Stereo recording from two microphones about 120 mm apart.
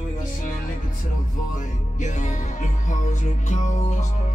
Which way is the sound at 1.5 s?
90° left.